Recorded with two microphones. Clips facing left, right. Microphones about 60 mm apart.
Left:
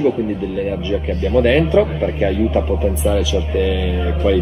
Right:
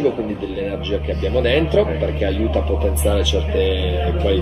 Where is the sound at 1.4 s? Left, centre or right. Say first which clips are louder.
Left 3 dB; centre.